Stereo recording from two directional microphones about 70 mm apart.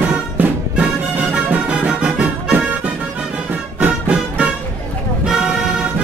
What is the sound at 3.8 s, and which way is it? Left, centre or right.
Music, centre.